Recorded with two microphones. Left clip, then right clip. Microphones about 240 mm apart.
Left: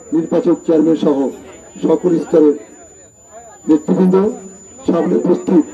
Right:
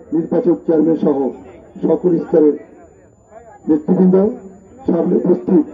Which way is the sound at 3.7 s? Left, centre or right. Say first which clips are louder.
Left 1 dB; centre.